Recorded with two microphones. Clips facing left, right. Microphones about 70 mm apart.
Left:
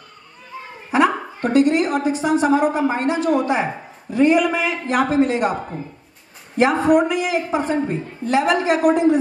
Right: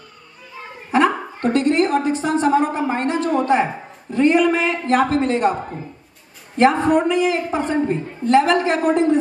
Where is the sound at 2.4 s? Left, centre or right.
Centre.